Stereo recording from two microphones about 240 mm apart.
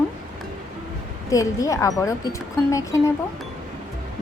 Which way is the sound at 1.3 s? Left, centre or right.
Centre.